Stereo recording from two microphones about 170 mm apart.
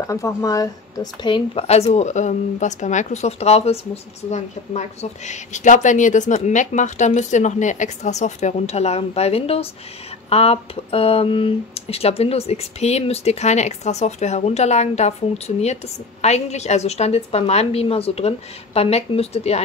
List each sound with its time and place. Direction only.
0.0 s speech: 15° left (ahead or behind); by 19.6 s 40° left (ahead or behind)